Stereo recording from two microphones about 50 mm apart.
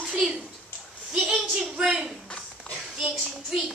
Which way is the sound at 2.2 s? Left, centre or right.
Left.